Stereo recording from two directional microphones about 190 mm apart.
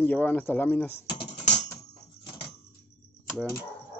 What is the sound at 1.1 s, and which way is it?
Music, 35° left (ahead or behind).